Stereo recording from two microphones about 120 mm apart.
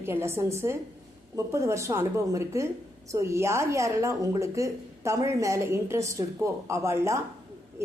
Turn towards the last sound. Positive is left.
turn(degrees=-25)  # may be behind; listen again after turning